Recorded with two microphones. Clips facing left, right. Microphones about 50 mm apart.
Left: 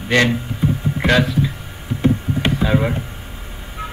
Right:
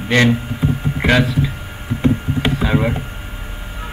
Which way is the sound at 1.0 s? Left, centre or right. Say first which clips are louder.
Right 1 dB; centre.